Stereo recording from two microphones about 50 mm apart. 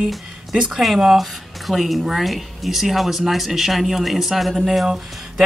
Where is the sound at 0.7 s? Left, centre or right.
Centre.